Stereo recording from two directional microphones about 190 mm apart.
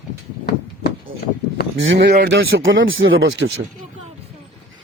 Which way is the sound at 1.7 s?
75° right (ahead or behind).